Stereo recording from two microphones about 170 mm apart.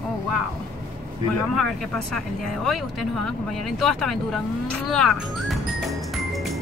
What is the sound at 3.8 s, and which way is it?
Speech, 5° left (ahead or behind).